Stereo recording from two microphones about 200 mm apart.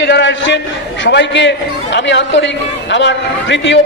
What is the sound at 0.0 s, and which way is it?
A man's voice, 60° left (ahead or behind).